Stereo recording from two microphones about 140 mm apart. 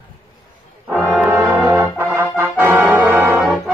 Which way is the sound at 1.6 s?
25° right (ahead or behind).